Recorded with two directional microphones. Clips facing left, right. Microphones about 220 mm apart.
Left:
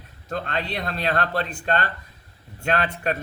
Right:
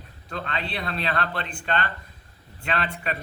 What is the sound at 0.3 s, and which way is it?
A man's voice, 45° left (ahead or behind).